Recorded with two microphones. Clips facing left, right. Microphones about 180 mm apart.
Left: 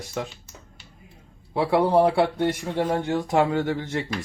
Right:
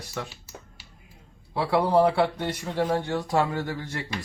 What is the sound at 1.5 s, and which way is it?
Speech, 20° left (ahead or behind).